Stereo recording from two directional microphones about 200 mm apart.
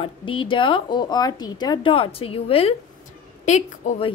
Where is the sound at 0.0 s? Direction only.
25° left (ahead or behind).